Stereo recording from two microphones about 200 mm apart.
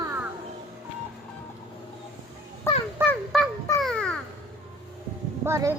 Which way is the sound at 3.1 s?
Centre (ahead or behind).